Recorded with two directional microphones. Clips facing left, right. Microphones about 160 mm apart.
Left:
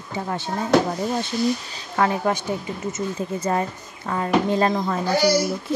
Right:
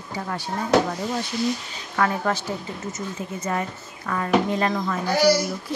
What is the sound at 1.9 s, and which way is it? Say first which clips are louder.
Speech: left 2 dB; 20° left (ahead or behind).